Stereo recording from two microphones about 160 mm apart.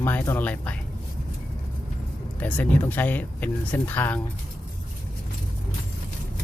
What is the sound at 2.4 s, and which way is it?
Speech, 10° left (ahead or behind).